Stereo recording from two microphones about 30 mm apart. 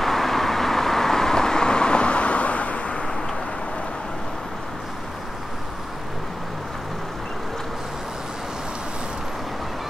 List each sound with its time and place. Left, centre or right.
0.0 s vehicle: centre; by 2.9 s left